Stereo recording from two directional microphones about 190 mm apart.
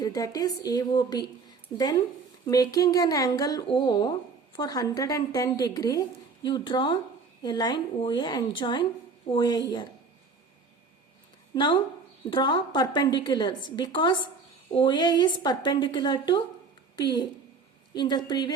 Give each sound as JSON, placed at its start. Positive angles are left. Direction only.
{"t": 0.0, "sound": "speech", "side_deg": 20}
{"t": 2.5, "sound": "speech", "side_deg": 20}
{"t": 11.5, "sound": "speech", "side_deg": 25}